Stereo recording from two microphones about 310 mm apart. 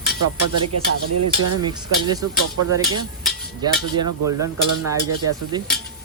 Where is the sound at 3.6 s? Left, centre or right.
Centre.